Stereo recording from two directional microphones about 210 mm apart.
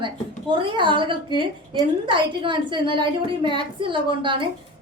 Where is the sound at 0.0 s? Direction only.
25° right (ahead or behind).